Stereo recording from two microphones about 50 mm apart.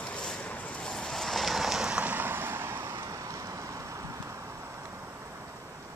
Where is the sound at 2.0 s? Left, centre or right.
Right.